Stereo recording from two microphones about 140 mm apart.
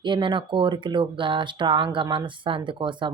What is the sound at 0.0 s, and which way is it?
Speech, 35° right (ahead or behind).